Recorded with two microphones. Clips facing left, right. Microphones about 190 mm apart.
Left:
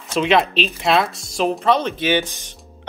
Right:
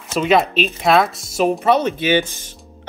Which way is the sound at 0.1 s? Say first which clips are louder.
Right 1 dB; 5° right (ahead or behind).